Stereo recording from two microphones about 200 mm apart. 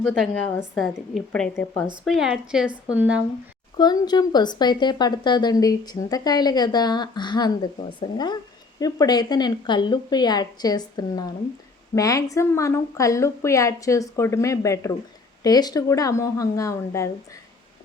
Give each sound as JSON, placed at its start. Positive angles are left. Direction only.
{"t": 0.0, "sound": "a woman's voice", "side_deg": 5}
{"t": 3.8, "sound": "a woman's voice", "side_deg": 20}